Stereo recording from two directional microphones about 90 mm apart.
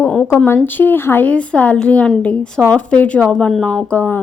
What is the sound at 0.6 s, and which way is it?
A woman's voice, 20° left (ahead or behind).